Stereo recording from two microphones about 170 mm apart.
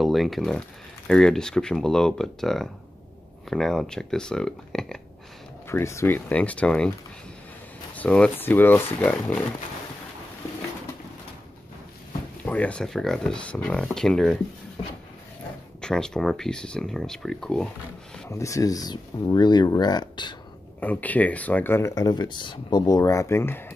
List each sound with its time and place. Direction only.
0.0 s speech: centre (ahead or behind)
5.7 s speech: 15° left (ahead or behind)
7.9 s speech: 10° left (ahead or behind)
12.4 s speech: 10° left (ahead or behind)
15.8 s speech: 5° left (ahead or behind)
18.3 s speech: 20° left (ahead or behind)
20.8 s speech: 10° left (ahead or behind)